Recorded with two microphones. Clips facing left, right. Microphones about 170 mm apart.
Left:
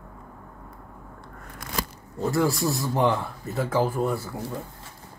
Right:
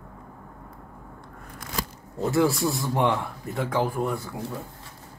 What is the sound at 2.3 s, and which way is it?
Speech, centre (ahead or behind).